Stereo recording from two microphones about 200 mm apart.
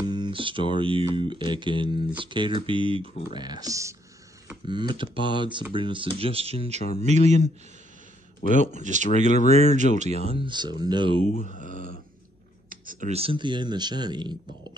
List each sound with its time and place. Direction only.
0.1 s speech: 25° right (ahead or behind)
8.4 s a man's voice: 40° left (ahead or behind)
8.7 s speech: 35° right (ahead or behind)
11.2 s speech: 40° left (ahead or behind)
13.1 s speech: 30° right (ahead or behind)